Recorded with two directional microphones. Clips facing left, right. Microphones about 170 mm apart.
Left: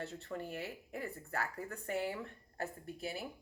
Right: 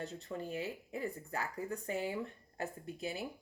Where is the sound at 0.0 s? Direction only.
15° right (ahead or behind).